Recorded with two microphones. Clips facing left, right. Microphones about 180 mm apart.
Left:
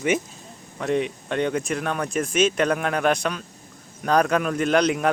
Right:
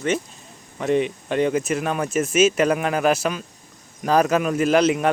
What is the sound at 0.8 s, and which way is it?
A man's voice, centre (ahead or behind).